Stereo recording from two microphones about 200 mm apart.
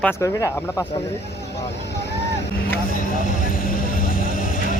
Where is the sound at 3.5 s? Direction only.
45° left (ahead or behind).